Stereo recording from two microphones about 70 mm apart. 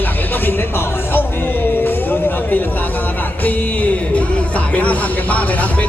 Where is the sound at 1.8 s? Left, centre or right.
Left.